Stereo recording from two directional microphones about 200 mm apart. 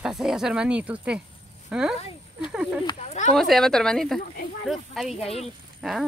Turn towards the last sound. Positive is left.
turn(degrees=0)  # may be behind; listen again after turning